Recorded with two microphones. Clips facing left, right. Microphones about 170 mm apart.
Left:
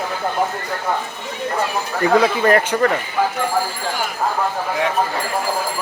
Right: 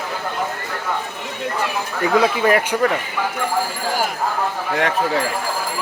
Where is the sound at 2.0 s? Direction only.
5° right (ahead or behind).